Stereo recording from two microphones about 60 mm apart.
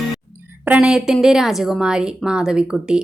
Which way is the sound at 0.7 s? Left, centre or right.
Centre.